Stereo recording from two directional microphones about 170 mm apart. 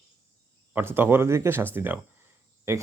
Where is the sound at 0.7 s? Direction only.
15° right (ahead or behind).